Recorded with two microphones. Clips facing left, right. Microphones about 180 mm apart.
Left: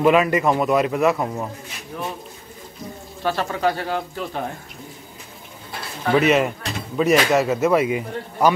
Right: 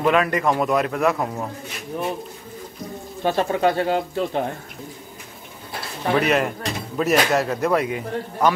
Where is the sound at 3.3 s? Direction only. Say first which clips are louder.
Right 2 dB; 20° right (ahead or behind).